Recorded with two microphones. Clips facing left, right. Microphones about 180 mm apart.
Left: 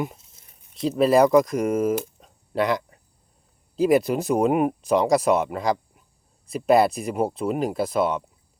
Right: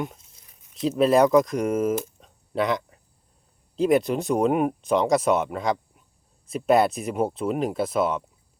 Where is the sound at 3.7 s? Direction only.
Centre (ahead or behind).